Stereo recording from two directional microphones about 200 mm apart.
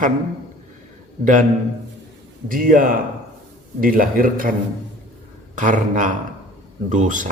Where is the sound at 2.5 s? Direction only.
45° right (ahead or behind).